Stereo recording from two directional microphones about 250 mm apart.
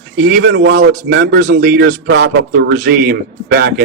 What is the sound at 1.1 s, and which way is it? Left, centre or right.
Speech, right.